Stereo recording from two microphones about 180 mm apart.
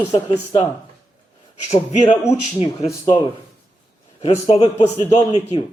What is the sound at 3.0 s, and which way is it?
Speech, 25° left (ahead or behind).